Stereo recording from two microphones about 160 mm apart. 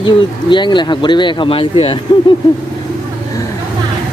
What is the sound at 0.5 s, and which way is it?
Speech, 30° left (ahead or behind).